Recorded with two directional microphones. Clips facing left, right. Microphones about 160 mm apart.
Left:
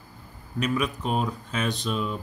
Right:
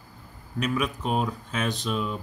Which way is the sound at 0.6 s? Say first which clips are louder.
Left 1 dB; centre (ahead or behind).